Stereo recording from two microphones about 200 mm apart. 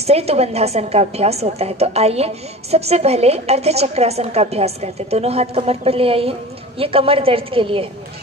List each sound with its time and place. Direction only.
0.0 s a woman's voice: 30° right (ahead or behind)